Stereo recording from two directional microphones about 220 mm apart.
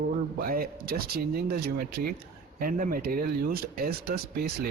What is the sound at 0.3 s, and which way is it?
Speech, 40° right (ahead or behind).